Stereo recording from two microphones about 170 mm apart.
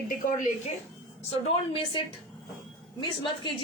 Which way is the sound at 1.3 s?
30° left (ahead or behind).